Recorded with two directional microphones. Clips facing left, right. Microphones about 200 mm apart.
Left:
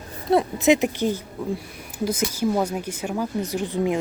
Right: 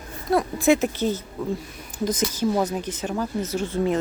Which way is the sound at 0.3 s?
20° left (ahead or behind).